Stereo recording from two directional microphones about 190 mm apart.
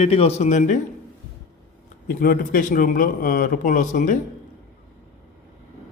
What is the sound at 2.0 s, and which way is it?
A man's voice, 50° left (ahead or behind).